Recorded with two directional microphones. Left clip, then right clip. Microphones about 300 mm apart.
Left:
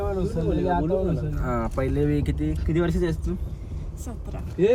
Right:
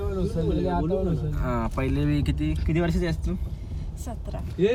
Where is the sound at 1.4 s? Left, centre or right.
Centre.